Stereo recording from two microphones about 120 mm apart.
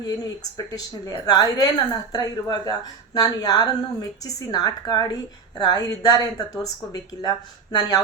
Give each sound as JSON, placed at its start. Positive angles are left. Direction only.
{"t": 0.0, "sound": "speech", "side_deg": 30}